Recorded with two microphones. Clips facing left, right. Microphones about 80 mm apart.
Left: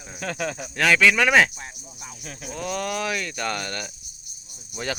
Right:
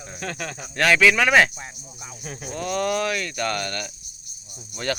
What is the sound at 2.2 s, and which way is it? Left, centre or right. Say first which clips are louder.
Speech: right 4 dB; centre.